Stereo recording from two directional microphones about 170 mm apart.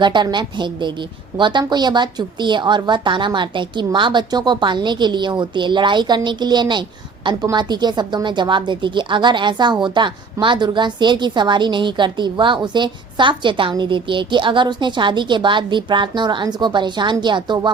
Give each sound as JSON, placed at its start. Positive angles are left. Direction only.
{"t": 0.0, "sound": "speech", "side_deg": -25}